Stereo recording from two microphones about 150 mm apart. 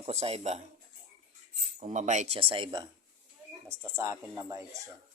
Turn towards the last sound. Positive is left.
turn(degrees=-20)  # may be behind; listen again after turning